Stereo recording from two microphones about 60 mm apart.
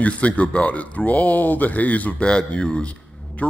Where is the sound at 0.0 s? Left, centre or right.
Left.